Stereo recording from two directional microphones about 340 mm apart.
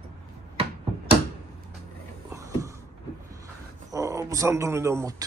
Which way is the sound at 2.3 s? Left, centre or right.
Centre.